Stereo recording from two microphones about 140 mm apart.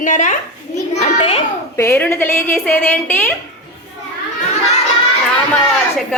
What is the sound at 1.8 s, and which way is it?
A woman's voice, 20° left (ahead or behind).